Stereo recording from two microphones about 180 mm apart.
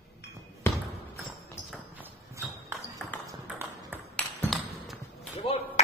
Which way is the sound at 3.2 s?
10° right (ahead or behind).